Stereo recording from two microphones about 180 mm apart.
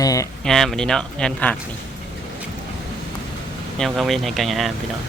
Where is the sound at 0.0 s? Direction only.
20° left (ahead or behind).